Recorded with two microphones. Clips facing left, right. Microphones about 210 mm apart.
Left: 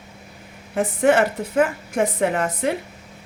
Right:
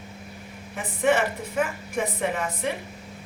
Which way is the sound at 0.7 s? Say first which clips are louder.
Left 6 dB; 80° left.